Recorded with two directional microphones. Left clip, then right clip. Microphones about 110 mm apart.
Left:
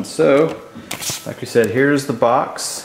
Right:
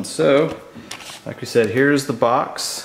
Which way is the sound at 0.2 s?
35° right (ahead or behind).